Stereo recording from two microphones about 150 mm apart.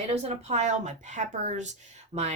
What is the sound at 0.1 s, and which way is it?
A woman's voice, 45° right (ahead or behind).